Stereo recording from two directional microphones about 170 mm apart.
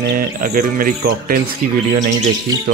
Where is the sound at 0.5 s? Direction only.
55° right (ahead or behind).